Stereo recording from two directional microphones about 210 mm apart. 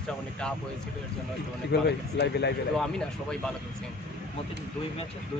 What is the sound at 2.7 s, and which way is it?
Speech, 5° left (ahead or behind).